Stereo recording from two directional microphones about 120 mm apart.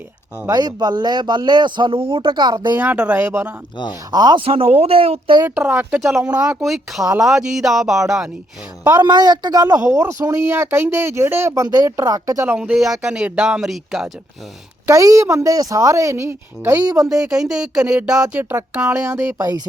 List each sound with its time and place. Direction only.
0.5 s speech: 35° right (ahead or behind)
2.7 s speech: 10° right (ahead or behind)
4.1 s speech: 35° right (ahead or behind)
4.4 s speech: 50° right (ahead or behind)
5.5 s speech: 15° right (ahead or behind)
8.9 s speech: 35° right (ahead or behind)
12.5 s speech: 10° right (ahead or behind)
14.8 s speech: 25° right (ahead or behind)
17.0 s speech: 5° right (ahead or behind)
19.1 s speech: 30° right (ahead or behind)